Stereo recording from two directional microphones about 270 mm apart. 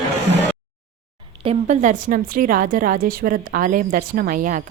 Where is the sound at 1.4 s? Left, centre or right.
Right.